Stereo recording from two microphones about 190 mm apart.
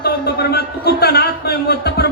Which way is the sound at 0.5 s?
55° left (ahead or behind).